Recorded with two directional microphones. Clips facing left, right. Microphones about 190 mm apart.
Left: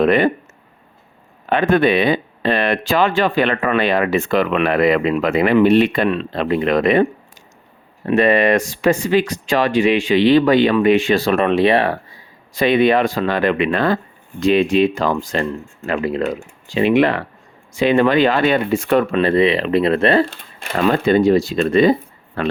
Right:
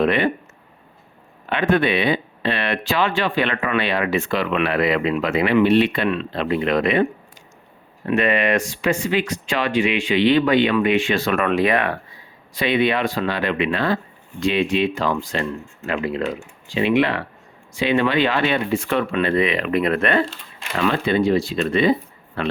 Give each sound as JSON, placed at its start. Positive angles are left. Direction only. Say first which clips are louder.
{"t": 0.0, "sound": "speech", "louder": "left 4 dB", "side_deg": 45}
{"t": 1.5, "sound": "speech", "louder": "left 4 dB", "side_deg": 45}
{"t": 8.0, "sound": "speech", "louder": "left 5 dB", "side_deg": 35}
{"t": 12.5, "sound": "speech", "louder": "left 5 dB", "side_deg": 45}
{"t": 20.7, "sound": "speech", "louder": "left 5 dB", "side_deg": 45}